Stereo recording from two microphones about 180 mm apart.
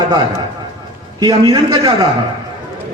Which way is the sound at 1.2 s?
25° right (ahead or behind).